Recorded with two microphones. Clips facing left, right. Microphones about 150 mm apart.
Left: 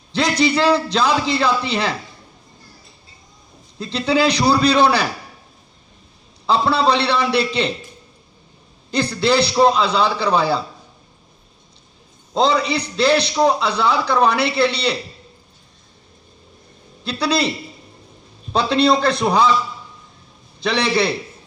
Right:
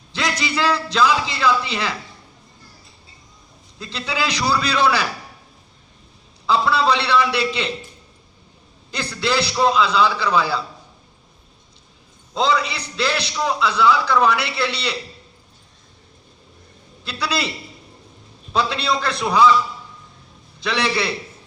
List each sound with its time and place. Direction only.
0.2 s a man's voice: 35° left (ahead or behind)
3.8 s a man's voice: 35° left (ahead or behind)
6.5 s a man's voice: 35° left (ahead or behind)
8.9 s a man's voice: 35° left (ahead or behind)
12.3 s a man's voice: 30° left (ahead or behind)
17.0 s a man's voice: 35° left (ahead or behind)
18.5 s a man's voice: 35° left (ahead or behind)
20.7 s a man's voice: 35° left (ahead or behind)